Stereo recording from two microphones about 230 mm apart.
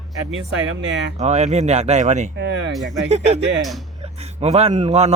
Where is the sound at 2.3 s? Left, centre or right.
Right.